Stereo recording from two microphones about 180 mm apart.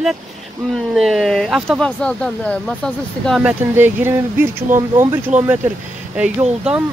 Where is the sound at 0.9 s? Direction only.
Centre (ahead or behind).